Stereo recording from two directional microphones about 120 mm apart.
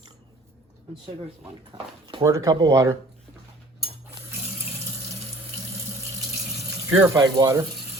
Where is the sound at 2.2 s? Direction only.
25° right (ahead or behind).